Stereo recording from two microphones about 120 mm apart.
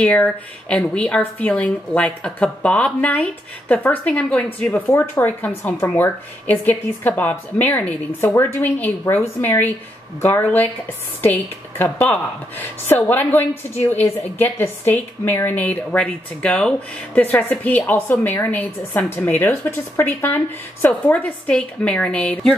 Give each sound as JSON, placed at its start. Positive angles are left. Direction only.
{"t": 0.0, "sound": "a woman's voice", "side_deg": 10}
{"t": 11.8, "sound": "a woman's voice", "side_deg": 15}